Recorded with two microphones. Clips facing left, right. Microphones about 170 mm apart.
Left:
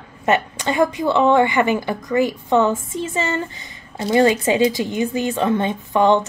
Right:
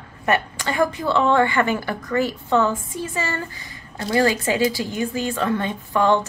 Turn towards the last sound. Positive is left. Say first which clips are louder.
# left 3 dB
turn(degrees=20)  # may be behind; listen again after turning